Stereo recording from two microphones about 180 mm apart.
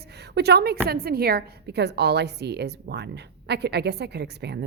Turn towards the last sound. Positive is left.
turn(degrees=-70)  # may be behind; listen again after turning